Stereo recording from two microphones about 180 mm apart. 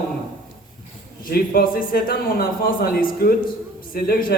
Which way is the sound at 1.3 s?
55° left (ahead or behind).